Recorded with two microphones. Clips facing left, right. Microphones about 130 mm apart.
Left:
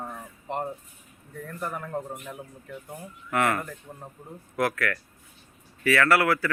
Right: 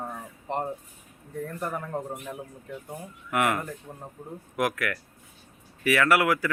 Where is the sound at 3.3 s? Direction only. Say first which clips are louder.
Even; 15° right (ahead or behind).